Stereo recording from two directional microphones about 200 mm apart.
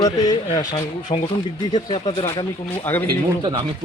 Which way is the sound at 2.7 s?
10° left (ahead or behind).